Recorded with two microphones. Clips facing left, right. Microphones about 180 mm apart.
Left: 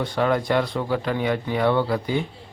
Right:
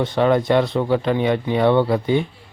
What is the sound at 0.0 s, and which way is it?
Speech, 25° right (ahead or behind).